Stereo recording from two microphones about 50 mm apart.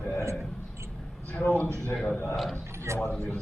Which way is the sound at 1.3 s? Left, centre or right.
Left.